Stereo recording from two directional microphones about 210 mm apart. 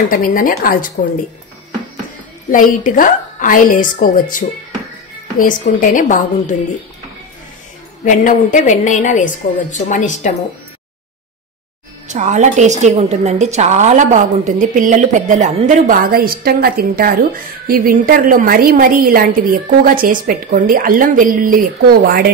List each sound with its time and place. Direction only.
0.1 s a woman's voice: 40° left (ahead or behind)
2.5 s a woman's voice: 40° left (ahead or behind)
8.0 s a woman's voice: 40° left (ahead or behind)
12.1 s a woman's voice: 35° right (ahead or behind)